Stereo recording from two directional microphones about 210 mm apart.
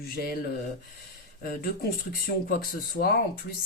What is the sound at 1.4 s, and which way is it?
Speech, 45° left (ahead or behind).